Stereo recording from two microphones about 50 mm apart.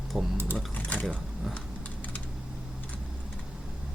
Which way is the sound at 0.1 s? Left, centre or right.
Centre.